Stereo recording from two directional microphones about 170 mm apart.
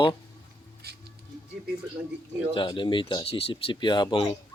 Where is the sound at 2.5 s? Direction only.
30° left (ahead or behind).